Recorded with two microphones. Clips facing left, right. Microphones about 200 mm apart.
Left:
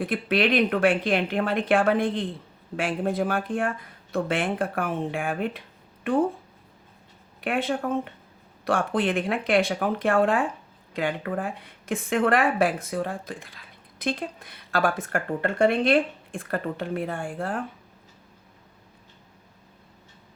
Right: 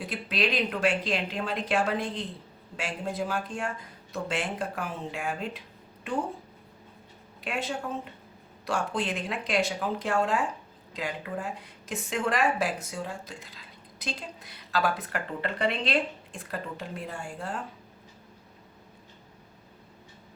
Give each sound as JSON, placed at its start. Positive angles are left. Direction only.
{"t": 0.0, "sound": "a woman's voice", "side_deg": 55}
{"t": 7.4, "sound": "a woman's voice", "side_deg": 55}